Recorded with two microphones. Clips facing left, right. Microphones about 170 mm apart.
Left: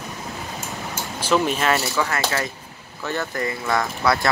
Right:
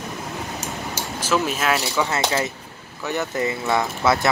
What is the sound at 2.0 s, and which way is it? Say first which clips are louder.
Speech: right 2 dB; 20° right (ahead or behind).